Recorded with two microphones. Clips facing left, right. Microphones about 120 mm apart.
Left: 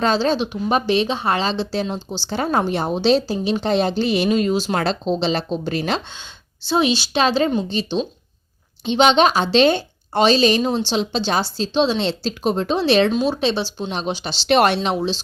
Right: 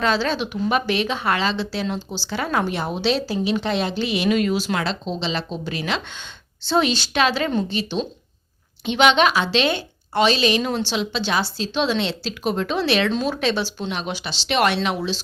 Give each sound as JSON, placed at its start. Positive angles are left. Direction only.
{"t": 0.0, "sound": "a woman's voice", "side_deg": 35}
{"t": 6.7, "sound": "a woman's voice", "side_deg": 20}
{"t": 7.2, "sound": "speech", "side_deg": 30}
{"t": 8.8, "sound": "a woman's voice", "side_deg": 30}
{"t": 14.4, "sound": "a woman's voice", "side_deg": 40}
{"t": 14.8, "sound": "speech", "side_deg": 30}